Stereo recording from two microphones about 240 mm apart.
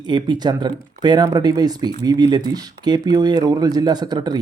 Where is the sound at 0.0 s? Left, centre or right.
Centre.